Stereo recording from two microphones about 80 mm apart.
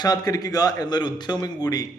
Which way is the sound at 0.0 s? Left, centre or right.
Left.